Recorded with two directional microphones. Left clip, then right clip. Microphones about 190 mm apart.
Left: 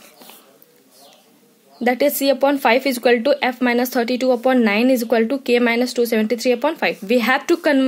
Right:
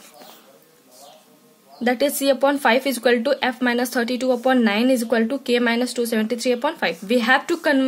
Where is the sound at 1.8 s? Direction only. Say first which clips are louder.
Left 2 dB; 30° left (ahead or behind).